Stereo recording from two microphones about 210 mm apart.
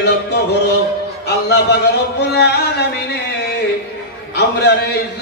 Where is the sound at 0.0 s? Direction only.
55° left (ahead or behind).